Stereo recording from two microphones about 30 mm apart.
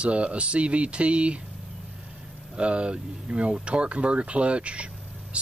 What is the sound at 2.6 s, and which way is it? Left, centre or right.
Speech, right.